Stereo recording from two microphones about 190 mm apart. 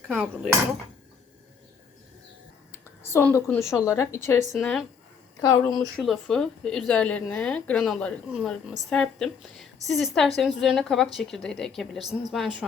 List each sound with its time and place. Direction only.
0.1 s speech: centre (ahead or behind)
3.0 s a woman's voice: 15° left (ahead or behind)
4.5 s speech: centre (ahead or behind)
5.4 s a woman's voice: 20° left (ahead or behind)
6.0 s speech: centre (ahead or behind)